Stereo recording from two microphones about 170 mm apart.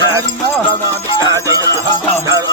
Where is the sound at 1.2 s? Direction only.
20° right (ahead or behind).